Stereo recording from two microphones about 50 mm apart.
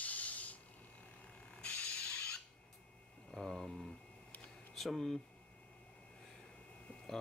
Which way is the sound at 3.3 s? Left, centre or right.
Centre.